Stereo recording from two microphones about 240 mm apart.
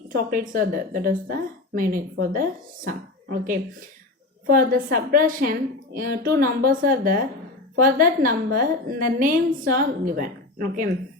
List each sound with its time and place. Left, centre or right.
0.3 s speech: right